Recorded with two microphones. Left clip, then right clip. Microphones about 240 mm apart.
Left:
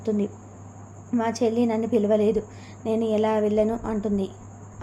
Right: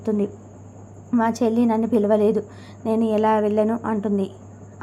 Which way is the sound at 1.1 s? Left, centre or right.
Centre.